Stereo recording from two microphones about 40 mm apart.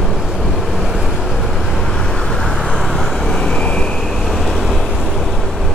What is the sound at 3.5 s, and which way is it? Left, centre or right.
Vehicle, left.